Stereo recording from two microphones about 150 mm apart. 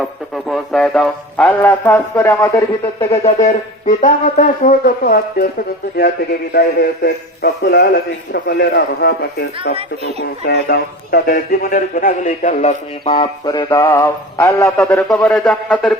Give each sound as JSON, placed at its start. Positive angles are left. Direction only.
{"t": 0.0, "sound": "speech", "side_deg": 0}
{"t": 3.1, "sound": "speech", "side_deg": 50}
{"t": 6.5, "sound": "a man's voice", "side_deg": 90}
{"t": 13.1, "sound": "a sound", "side_deg": 35}
{"t": 13.8, "sound": "a sound", "side_deg": 15}
{"t": 15.1, "sound": "speech", "side_deg": 5}